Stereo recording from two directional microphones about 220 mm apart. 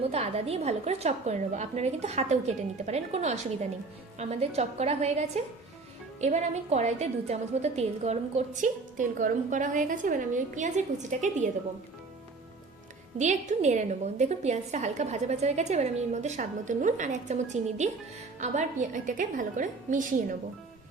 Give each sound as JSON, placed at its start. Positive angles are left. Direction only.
{"t": 0.0, "sound": "a woman's voice", "side_deg": -30}
{"t": 13.1, "sound": "a woman's voice", "side_deg": -30}